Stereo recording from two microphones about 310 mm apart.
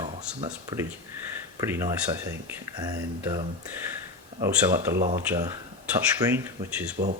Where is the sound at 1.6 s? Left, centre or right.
Centre.